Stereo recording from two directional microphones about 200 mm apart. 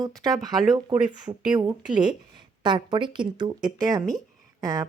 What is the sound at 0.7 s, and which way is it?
Speech, 25° right (ahead or behind).